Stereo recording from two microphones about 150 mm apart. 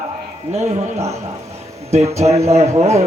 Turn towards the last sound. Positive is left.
turn(degrees=-45)  # may be behind; listen again after turning